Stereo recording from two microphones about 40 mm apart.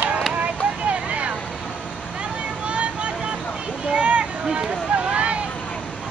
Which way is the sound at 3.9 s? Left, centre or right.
Right.